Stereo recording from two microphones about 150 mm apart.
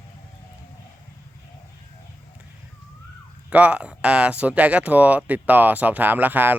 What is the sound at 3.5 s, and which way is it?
Speech, 10° right (ahead or behind).